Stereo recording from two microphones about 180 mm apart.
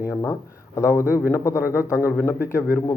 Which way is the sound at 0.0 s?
15° left (ahead or behind).